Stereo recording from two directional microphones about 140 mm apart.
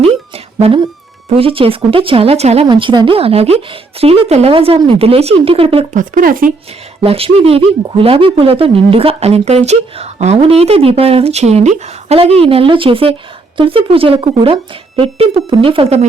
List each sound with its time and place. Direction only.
0.3 s a sound: 45° right (ahead or behind)
1.3 s speech: 40° right (ahead or behind)
2.6 s speech: 35° right (ahead or behind)
5.9 s speech: 65° right (ahead or behind)
7.0 s speech: 45° right (ahead or behind)